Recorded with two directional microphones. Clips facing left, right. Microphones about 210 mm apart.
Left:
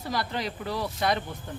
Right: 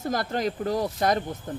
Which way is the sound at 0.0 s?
45° right (ahead or behind).